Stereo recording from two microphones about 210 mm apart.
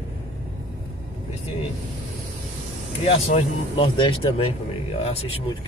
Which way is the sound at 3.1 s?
30° left (ahead or behind).